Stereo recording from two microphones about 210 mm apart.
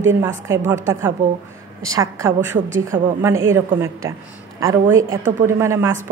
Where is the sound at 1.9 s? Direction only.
15° right (ahead or behind).